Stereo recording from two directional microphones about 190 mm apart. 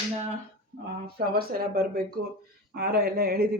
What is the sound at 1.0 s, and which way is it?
A man's voice, 55° right (ahead or behind).